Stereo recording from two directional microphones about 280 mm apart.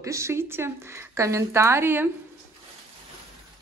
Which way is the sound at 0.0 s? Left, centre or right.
Centre.